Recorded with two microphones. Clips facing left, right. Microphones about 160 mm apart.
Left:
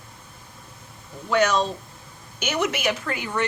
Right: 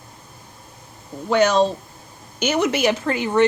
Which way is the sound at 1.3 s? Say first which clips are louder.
Right 5 dB; 30° right (ahead or behind).